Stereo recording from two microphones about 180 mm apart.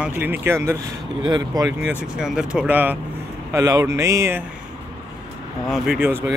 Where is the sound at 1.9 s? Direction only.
5° right (ahead or behind).